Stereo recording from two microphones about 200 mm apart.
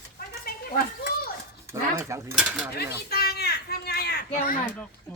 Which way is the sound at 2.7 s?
50° left (ahead or behind).